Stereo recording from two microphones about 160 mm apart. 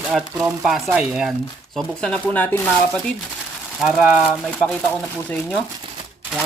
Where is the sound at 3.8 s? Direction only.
5° right (ahead or behind).